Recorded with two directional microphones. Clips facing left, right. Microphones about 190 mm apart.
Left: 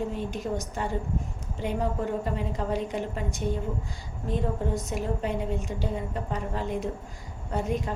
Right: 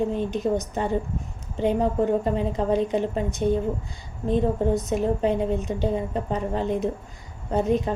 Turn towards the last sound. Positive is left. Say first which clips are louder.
# right 7 dB
turn(degrees=-25)  # may be behind; listen again after turning